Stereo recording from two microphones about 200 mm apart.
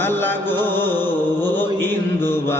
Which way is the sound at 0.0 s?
10° left (ahead or behind).